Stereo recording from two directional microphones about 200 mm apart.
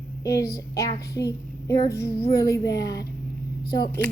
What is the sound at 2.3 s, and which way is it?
Speech, 20° left (ahead or behind).